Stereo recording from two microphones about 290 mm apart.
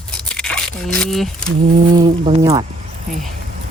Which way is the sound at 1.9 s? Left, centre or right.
Centre.